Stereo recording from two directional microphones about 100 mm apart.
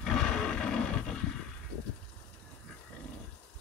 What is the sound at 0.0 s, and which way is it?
Roar, 5° left (ahead or behind).